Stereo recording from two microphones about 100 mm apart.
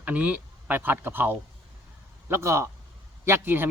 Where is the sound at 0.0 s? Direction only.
15° right (ahead or behind).